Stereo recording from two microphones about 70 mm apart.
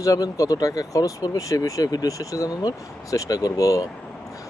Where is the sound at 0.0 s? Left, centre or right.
Left.